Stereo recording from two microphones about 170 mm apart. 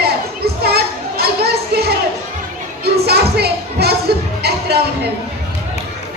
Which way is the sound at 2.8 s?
70° right (ahead or behind).